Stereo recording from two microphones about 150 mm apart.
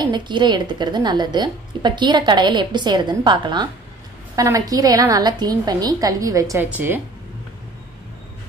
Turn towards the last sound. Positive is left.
turn(degrees=-15)  # may be behind; listen again after turning